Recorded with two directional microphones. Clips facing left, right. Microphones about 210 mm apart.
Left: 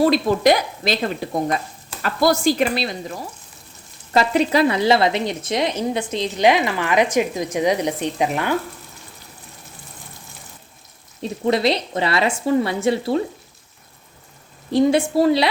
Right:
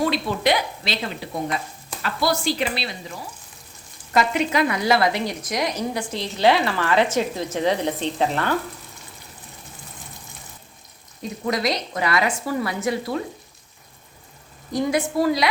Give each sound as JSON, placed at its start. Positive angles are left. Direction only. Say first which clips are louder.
{"t": 0.0, "sound": "a woman's voice", "louder": "left 6 dB", "side_deg": 45}
{"t": 4.1, "sound": "a woman's voice", "louder": "left 4 dB", "side_deg": 35}
{"t": 11.2, "sound": "a woman's voice", "louder": "left 5 dB", "side_deg": 30}
{"t": 14.7, "sound": "a woman's voice", "louder": "left 6 dB", "side_deg": 30}